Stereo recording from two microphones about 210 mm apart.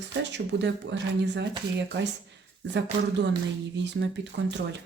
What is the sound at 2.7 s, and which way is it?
Speech, 55° right (ahead or behind).